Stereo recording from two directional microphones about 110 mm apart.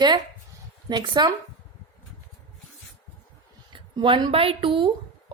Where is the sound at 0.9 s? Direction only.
45° right (ahead or behind).